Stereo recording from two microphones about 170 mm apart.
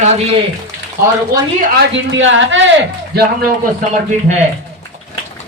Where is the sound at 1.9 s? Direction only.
90° right.